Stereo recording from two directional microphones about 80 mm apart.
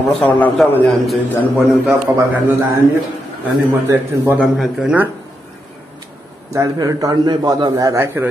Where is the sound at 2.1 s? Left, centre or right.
Right.